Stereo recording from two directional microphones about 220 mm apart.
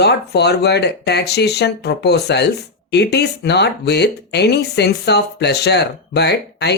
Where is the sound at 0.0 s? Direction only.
50° left (ahead or behind).